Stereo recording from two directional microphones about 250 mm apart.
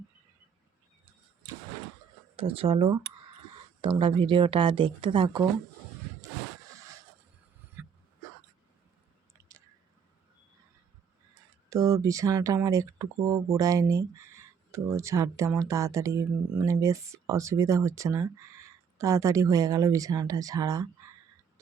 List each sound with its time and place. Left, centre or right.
2.3 s speech: right
6.7 s a sound: centre
7.8 s throat clearing: centre
11.7 s speech: centre